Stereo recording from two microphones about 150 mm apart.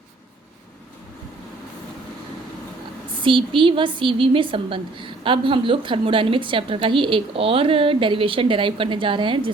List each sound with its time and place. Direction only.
3.2 s a woman's voice: 35° right (ahead or behind)